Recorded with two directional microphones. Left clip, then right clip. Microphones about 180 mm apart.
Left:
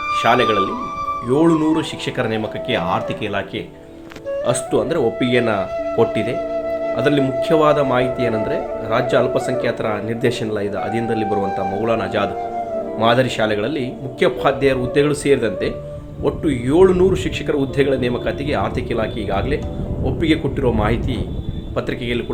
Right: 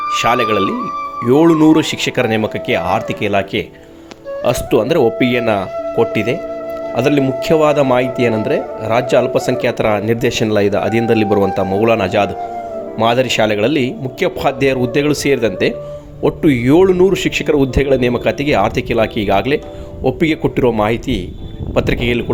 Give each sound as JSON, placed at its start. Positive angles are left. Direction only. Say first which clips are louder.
{"t": 0.1, "sound": "speech", "louder": "right 1 dB", "side_deg": -50}